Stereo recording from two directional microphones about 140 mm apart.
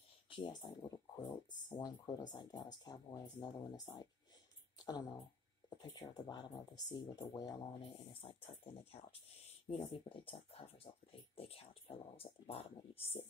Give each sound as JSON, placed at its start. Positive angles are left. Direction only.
{"t": 0.3, "sound": "speech", "side_deg": 35}